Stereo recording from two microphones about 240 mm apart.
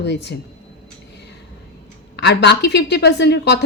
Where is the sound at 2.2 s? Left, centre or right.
Left.